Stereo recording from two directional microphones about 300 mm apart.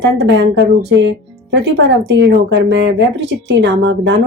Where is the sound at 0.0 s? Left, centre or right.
Right.